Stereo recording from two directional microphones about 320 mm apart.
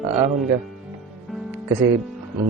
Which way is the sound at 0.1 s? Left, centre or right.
Right.